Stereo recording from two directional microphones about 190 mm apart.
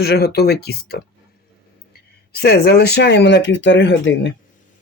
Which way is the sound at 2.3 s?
55° left (ahead or behind).